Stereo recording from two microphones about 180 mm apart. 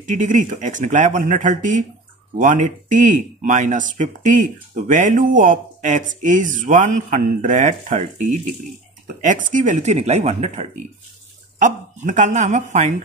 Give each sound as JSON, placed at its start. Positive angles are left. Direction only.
{"t": 0.0, "sound": "speech", "side_deg": -45}